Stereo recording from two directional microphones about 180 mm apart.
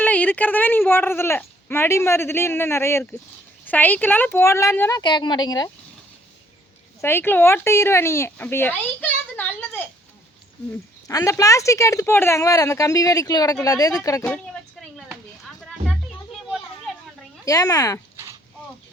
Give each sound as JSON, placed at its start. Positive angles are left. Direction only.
{"t": 0.0, "sound": "speech", "side_deg": 10}
{"t": 7.0, "sound": "speech", "side_deg": 10}
{"t": 11.1, "sound": "speech", "side_deg": 20}
{"t": 14.3, "sound": "a sound", "side_deg": 0}
{"t": 17.4, "sound": "speech", "side_deg": 20}